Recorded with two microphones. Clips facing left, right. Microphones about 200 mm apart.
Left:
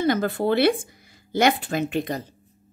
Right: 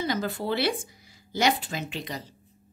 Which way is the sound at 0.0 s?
55° left (ahead or behind).